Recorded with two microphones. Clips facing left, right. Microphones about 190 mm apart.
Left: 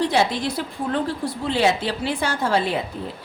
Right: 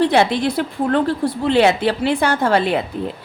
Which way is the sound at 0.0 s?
60° right (ahead or behind).